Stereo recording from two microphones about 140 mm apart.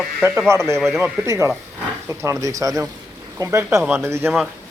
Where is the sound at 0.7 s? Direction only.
Centre (ahead or behind).